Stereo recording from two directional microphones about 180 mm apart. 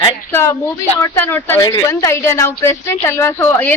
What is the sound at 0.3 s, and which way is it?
A woman's voice, 15° left (ahead or behind).